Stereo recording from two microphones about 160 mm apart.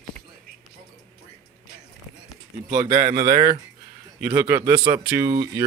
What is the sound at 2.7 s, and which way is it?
A man's voice, 20° right (ahead or behind).